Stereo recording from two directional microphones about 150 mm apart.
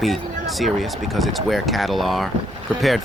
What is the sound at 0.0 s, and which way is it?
Speech, centre (ahead or behind).